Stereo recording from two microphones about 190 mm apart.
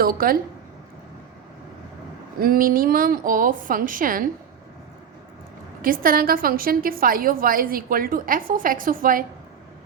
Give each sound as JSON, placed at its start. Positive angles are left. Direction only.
{"t": 0.0, "sound": "a woman's voice", "side_deg": -50}
{"t": 2.4, "sound": "a woman's voice", "side_deg": -50}
{"t": 5.8, "sound": "a woman's voice", "side_deg": -50}